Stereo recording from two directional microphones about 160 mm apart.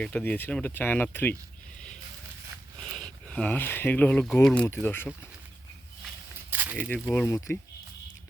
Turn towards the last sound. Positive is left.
turn(degrees=15)  # may be behind; listen again after turning